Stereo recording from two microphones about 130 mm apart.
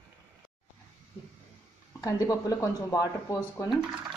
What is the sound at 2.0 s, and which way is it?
Speech, 25° left (ahead or behind).